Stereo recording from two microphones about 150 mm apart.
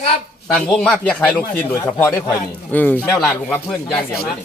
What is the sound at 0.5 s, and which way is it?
Speech, 5° left (ahead or behind).